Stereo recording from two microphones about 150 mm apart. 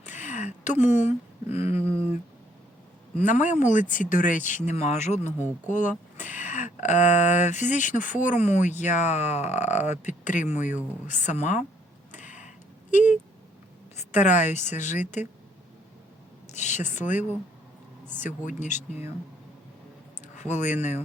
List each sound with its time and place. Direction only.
0.0 s a sound: 55° left (ahead or behind)
1.0 s speech: 45° left (ahead or behind)
3.2 s speech: 55° left (ahead or behind)
5.2 s speech: 15° right (ahead or behind)
5.6 s speech: 55° left (ahead or behind)
12.1 s tick-tock: 55° left (ahead or behind)
12.9 s a woman's voice: 55° left (ahead or behind)
16.5 s speech: 55° left (ahead or behind)
20.2 s a sound: 55° left (ahead or behind)